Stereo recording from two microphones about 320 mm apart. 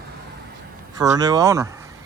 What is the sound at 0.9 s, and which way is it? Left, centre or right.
Speech, centre.